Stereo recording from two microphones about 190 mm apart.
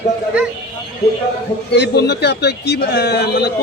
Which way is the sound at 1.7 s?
65° left (ahead or behind).